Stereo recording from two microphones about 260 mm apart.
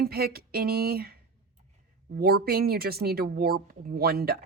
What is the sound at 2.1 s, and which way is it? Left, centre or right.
Speech, right.